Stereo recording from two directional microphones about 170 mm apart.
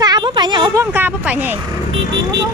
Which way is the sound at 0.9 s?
10° right (ahead or behind).